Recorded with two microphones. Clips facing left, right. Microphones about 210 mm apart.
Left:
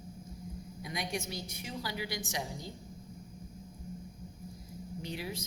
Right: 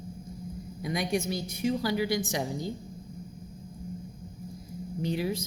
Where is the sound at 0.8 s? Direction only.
45° right (ahead or behind).